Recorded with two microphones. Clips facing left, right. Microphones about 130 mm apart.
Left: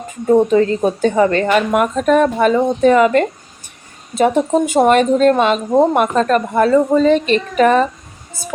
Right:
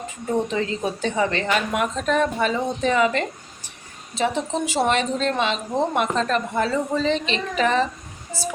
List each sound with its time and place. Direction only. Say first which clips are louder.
0.3 s speech: left 12 dB; 50° left (ahead or behind)